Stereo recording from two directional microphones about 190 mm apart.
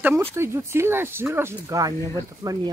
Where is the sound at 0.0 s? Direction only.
10° right (ahead or behind).